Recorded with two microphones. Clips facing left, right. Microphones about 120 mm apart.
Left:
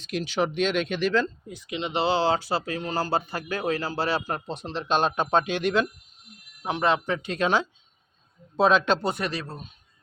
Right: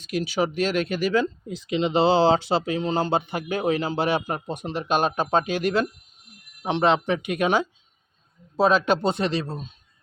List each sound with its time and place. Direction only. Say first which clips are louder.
0.1 s speech: right 2 dB; 10° right (ahead or behind)
1.7 s speech: right 5 dB; 30° right (ahead or behind); by 5.9 s 5° right (ahead or behind)
6.6 s speech: right 3 dB; 25° right (ahead or behind); by 9.0 s 5° right (ahead or behind)
9.0 s speech: right 5 dB; 25° right (ahead or behind)